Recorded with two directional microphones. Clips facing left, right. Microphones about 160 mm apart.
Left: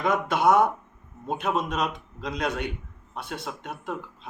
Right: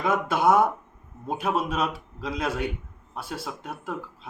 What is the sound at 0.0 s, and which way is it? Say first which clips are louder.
Speech: even; 5° right (ahead or behind).